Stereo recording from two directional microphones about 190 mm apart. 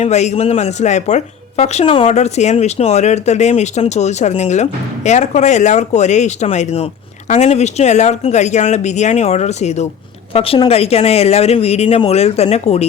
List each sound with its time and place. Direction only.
0.0 s a woman's voice: 35° left (ahead or behind)